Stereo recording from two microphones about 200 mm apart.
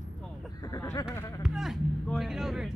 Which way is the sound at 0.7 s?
20° left (ahead or behind).